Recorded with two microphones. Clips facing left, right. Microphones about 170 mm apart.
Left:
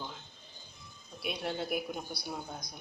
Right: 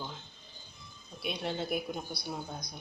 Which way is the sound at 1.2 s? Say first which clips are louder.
Right 1 dB; 5° left (ahead or behind).